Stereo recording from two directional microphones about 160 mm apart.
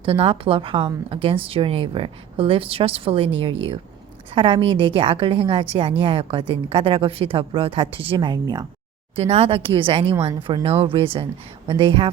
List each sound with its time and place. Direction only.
0.0 s a woman's voice: 35° right (ahead or behind)
9.1 s a woman's voice: 40° right (ahead or behind)